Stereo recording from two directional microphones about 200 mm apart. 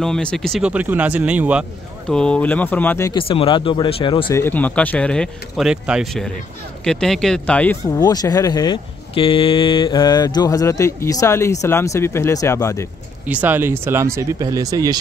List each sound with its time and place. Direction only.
0.0 s speech: 5° left (ahead or behind)
3.1 s speech: 25° left (ahead or behind)
4.4 s speech: 10° left (ahead or behind)
7.8 s speech: 20° left (ahead or behind)
13.3 s speech: 10° right (ahead or behind)